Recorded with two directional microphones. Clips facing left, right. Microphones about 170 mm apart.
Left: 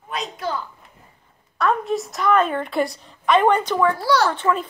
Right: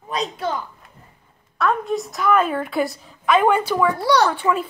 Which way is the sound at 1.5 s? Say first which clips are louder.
Even; centre (ahead or behind).